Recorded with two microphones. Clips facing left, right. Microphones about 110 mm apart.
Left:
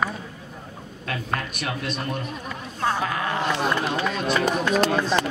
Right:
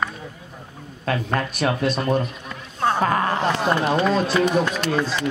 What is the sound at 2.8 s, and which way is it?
Music, 40° right (ahead or behind).